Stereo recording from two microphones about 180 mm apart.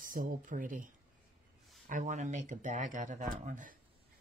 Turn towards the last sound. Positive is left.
turn(degrees=-45)  # may be behind; listen again after turning